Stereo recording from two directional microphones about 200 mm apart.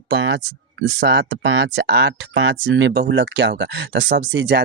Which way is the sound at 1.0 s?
60° right (ahead or behind).